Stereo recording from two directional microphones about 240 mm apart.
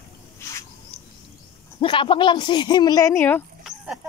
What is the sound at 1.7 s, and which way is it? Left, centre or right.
Speech, left.